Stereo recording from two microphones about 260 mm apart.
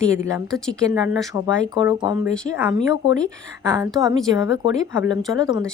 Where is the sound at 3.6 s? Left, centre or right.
Centre.